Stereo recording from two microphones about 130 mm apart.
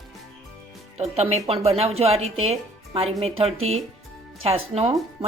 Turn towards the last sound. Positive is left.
turn(degrees=-50)  # may be behind; listen again after turning